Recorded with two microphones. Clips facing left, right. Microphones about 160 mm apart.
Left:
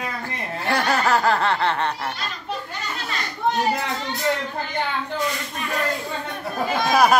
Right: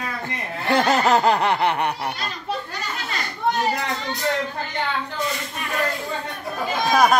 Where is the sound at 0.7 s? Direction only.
20° right (ahead or behind).